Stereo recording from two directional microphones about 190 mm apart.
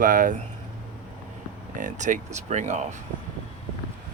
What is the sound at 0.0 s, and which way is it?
Speech, 45° right (ahead or behind).